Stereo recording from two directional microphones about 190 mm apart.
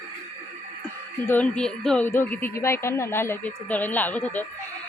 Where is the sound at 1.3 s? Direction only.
5° left (ahead or behind).